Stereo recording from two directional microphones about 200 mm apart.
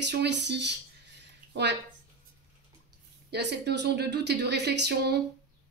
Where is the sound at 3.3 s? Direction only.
55° right (ahead or behind).